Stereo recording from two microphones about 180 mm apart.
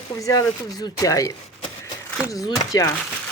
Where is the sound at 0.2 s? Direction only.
20° left (ahead or behind).